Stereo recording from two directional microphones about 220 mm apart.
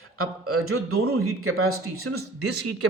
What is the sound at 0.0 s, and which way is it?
A man's voice, 75° right (ahead or behind).